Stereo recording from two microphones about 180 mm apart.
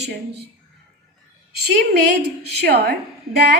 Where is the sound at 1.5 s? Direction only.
65° right (ahead or behind).